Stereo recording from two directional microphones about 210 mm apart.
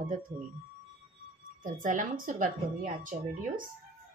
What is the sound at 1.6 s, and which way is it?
A woman's voice, 40° right (ahead or behind).